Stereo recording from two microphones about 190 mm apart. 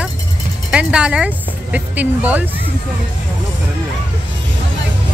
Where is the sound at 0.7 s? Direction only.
5° right (ahead or behind).